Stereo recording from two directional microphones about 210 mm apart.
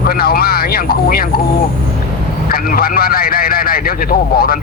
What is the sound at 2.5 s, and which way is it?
A man's voice, 45° left (ahead or behind).